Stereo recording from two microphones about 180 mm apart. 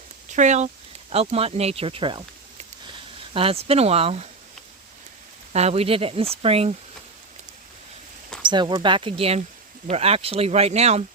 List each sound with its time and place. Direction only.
0.3 s speech: 40° right (ahead or behind)
5.5 s speech: 35° right (ahead or behind)
8.4 s speech: 25° right (ahead or behind)